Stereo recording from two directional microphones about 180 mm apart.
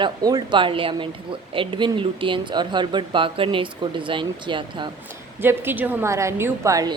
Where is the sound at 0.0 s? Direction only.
20° right (ahead or behind).